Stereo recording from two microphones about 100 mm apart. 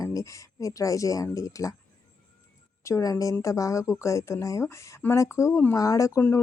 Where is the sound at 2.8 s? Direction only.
35° left (ahead or behind).